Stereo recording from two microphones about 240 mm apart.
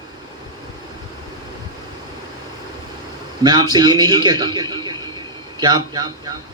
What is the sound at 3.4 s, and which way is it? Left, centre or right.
A man's voice, centre.